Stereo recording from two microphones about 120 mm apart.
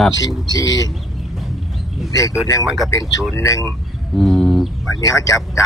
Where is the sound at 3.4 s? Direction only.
25° left (ahead or behind).